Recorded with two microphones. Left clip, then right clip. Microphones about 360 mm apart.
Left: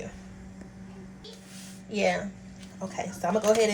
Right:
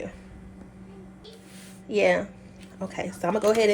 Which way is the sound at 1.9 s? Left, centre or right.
Centre.